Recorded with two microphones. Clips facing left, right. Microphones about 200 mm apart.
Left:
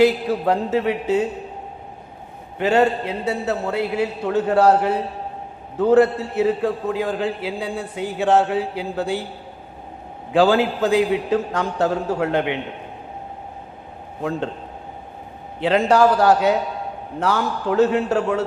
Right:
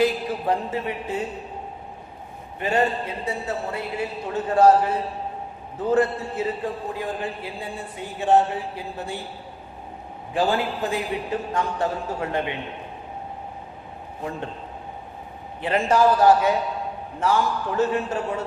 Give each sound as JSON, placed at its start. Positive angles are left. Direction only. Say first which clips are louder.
{"t": 0.0, "sound": "a man's voice", "louder": "left 6 dB", "side_deg": 75}
{"t": 2.6, "sound": "a man's voice", "louder": "left 5 dB", "side_deg": 75}
{"t": 10.3, "sound": "a man's voice", "louder": "left 7 dB", "side_deg": 90}
{"t": 15.6, "sound": "a man's voice", "louder": "left 4 dB", "side_deg": 80}